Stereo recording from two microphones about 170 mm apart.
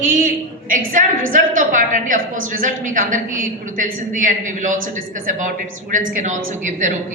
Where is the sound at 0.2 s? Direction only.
50° right (ahead or behind).